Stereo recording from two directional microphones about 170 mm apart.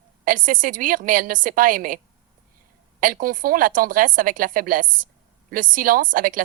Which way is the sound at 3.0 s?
55° right (ahead or behind).